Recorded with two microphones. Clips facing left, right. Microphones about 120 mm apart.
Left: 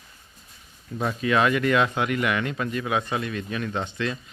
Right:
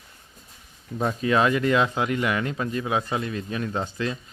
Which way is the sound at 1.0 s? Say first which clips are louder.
Right 1 dB; 30° right (ahead or behind).